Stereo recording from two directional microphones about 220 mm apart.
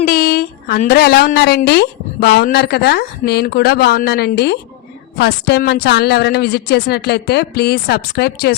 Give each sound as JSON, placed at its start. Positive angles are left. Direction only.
{"t": 0.0, "sound": "speech", "side_deg": 40}